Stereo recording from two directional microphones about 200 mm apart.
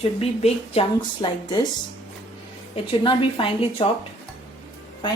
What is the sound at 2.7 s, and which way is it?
A woman's voice, 25° left (ahead or behind).